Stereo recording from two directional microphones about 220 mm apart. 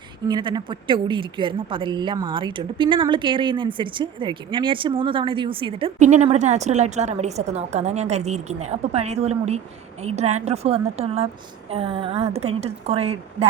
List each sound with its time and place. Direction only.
0.3 s a woman's voice: 20° right (ahead or behind)